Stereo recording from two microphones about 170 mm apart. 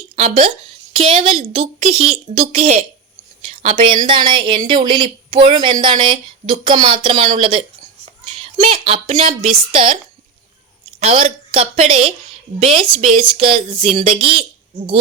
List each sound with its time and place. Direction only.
0.2 s a woman's voice: 35° right (ahead or behind)
11.0 s a woman's voice: 35° right (ahead or behind)